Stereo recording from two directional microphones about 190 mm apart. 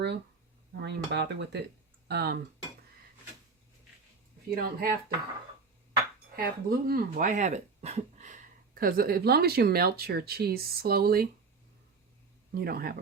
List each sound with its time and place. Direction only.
0.8 s speech: 65° right (ahead or behind)
4.5 s speech: 50° right (ahead or behind)
6.3 s speech: 50° right (ahead or behind)
12.5 s speech: 55° right (ahead or behind)